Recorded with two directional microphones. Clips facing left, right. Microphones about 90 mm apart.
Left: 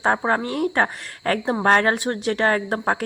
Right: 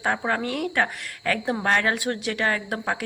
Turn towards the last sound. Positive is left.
turn(degrees=40)  # may be behind; listen again after turning